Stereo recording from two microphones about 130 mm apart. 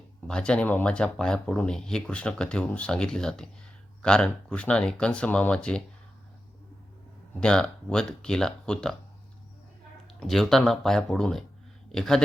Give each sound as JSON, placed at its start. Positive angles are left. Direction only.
{"t": 0.3, "sound": "speech", "side_deg": 5}
{"t": 7.3, "sound": "speech", "side_deg": 5}
{"t": 10.1, "sound": "speech", "side_deg": 0}